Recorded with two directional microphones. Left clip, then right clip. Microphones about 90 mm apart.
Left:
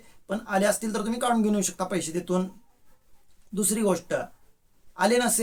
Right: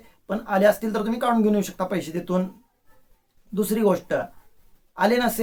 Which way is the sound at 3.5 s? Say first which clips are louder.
Right 4 dB; 25° left (ahead or behind).